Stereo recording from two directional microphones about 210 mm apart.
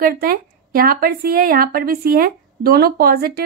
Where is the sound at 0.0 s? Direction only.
45° right (ahead or behind).